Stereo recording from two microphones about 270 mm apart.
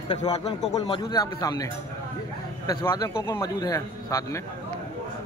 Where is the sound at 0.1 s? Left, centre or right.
Centre.